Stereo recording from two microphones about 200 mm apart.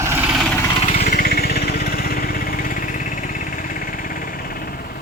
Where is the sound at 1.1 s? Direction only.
50° left (ahead or behind).